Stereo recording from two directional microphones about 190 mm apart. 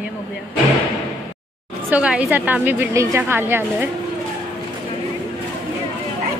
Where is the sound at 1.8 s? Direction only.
5° right (ahead or behind).